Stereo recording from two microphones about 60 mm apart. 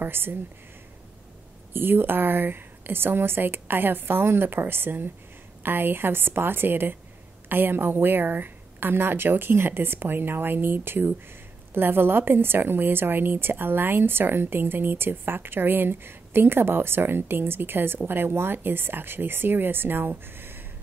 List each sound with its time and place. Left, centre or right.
0.0 s a woman's voice: right
1.7 s a woman's voice: right